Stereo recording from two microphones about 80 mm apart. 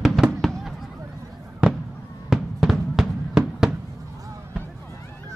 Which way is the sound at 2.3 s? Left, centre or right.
Centre.